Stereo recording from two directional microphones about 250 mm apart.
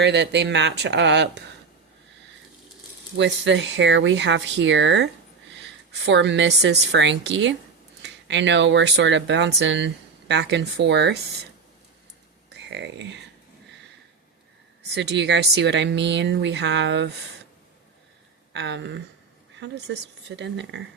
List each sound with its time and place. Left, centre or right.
0.0 s speech: right
3.2 s speech: right
6.1 s speech: right
12.7 s speech: right
14.9 s speech: right
18.5 s speech: right